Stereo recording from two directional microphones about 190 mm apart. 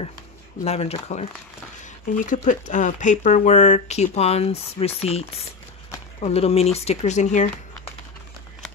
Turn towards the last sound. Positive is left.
turn(degrees=40)  # may be behind; listen again after turning